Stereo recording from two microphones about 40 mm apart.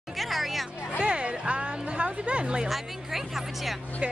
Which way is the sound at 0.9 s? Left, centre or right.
Right.